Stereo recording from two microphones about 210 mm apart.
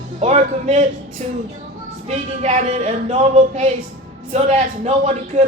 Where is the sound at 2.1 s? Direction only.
30° right (ahead or behind).